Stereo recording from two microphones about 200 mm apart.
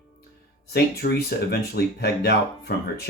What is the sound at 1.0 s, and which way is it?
Speech, 55° left (ahead or behind).